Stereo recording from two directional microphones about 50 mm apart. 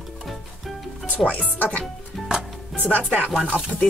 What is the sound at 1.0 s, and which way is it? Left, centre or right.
Speech, left.